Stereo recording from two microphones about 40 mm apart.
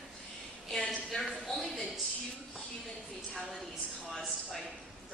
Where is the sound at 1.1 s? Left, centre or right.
Left.